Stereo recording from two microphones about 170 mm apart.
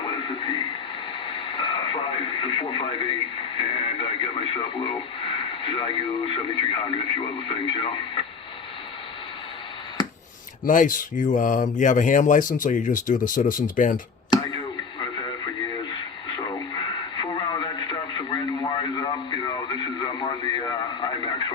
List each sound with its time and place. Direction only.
0.0 s speech: 30° left (ahead or behind)
10.7 s speech: 50° left (ahead or behind)
14.3 s a sound: 25° left (ahead or behind)
15.9 s radio: 25° left (ahead or behind)